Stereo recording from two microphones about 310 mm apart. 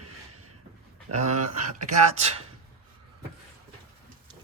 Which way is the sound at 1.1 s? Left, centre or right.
Right.